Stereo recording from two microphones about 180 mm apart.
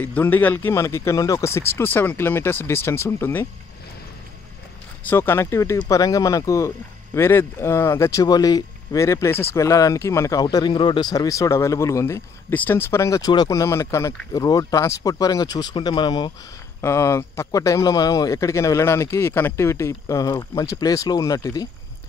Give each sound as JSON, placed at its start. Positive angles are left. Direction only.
{"t": 0.0, "sound": "speech", "side_deg": 10}
{"t": 5.0, "sound": "speech", "side_deg": 15}